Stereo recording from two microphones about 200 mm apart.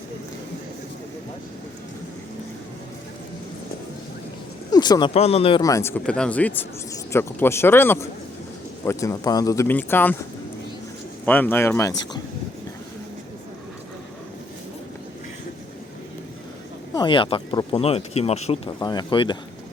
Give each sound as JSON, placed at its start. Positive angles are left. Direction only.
{"t": 4.7, "sound": "speech", "side_deg": 20}
{"t": 11.3, "sound": "speech", "side_deg": 10}
{"t": 16.9, "sound": "speech", "side_deg": 25}